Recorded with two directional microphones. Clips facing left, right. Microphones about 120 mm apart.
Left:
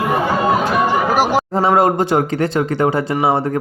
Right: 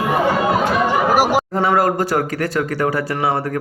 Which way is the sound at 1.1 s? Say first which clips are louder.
Even; 10° right (ahead or behind).